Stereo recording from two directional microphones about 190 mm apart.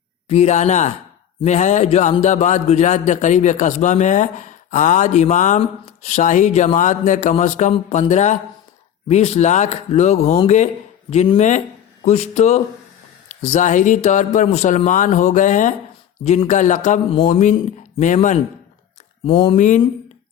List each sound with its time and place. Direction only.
0.3 s a man's voice: 35° left (ahead or behind)
19.2 s speech: 30° left (ahead or behind)
19.5 s a man's voice: 40° left (ahead or behind)